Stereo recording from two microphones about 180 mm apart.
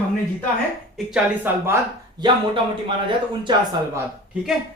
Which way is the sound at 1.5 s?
10° right (ahead or behind).